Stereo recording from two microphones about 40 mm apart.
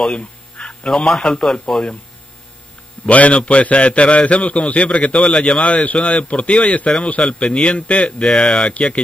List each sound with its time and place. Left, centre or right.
0.0 s a sound: left
1.2 s speech: left
3.1 s a man's voice: left
5.7 s a man's voice: left
8.3 s speech: centre